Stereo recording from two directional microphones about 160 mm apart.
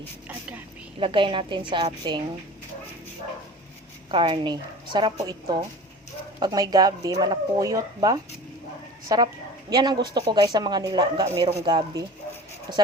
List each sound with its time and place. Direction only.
0.9 s a woman's voice: 35° right (ahead or behind)
4.1 s speech: 30° right (ahead or behind)
11.3 s a woman's voice: 40° right (ahead or behind)